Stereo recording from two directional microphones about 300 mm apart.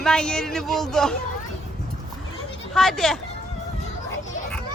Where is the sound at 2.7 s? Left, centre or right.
Centre.